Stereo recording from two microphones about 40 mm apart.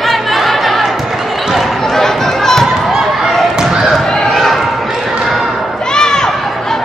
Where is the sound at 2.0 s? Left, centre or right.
Centre.